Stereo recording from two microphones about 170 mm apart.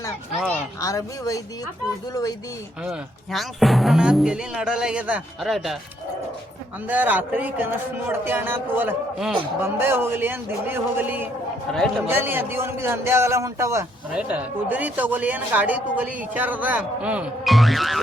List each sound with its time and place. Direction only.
0.8 s speech: 20° left (ahead or behind)
2.8 s speech: centre (ahead or behind)
6.8 s speech: 10° right (ahead or behind)
9.6 s speech: 15° right (ahead or behind)
14.1 s speech: 5° right (ahead or behind)